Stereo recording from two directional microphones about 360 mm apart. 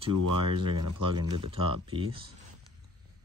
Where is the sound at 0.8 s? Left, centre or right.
Right.